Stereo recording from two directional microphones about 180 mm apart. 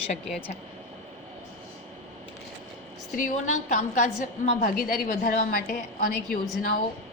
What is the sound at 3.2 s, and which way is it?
A woman's voice, 45° left (ahead or behind).